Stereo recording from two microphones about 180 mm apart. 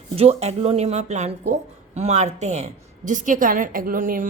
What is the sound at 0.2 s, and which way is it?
A woman's voice, 35° right (ahead or behind).